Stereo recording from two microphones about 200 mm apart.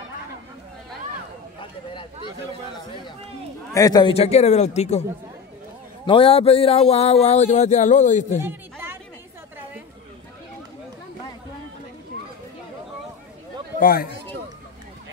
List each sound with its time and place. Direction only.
3.7 s speech: 20° left (ahead or behind)
6.0 s speech: 25° left (ahead or behind)
8.5 s chatter: 10° right (ahead or behind)
13.7 s speech: 45° left (ahead or behind)